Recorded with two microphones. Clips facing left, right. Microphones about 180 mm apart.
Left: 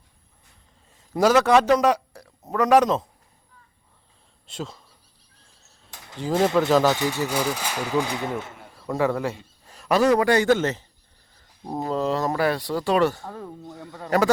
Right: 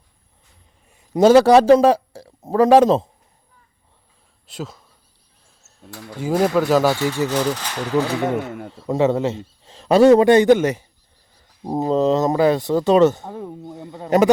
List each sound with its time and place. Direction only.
0.9 s a man's voice: 15° right (ahead or behind)
4.4 s speech: 5° right (ahead or behind)
6.2 s speech: 5° right (ahead or behind)
6.9 s speech: 15° left (ahead or behind)
8.2 s speech: 60° right (ahead or behind)
8.7 s speech: 20° right (ahead or behind)
11.6 s speech: 25° right (ahead or behind)